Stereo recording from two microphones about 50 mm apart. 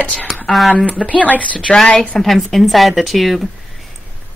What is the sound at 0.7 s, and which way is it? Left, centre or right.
Speech, left.